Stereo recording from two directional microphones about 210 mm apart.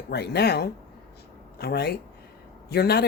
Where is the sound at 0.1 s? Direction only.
50° left (ahead or behind).